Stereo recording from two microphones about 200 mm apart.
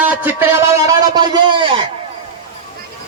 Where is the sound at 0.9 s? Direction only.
20° right (ahead or behind).